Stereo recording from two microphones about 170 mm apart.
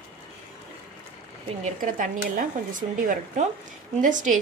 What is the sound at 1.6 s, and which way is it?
Speech, 50° right (ahead or behind).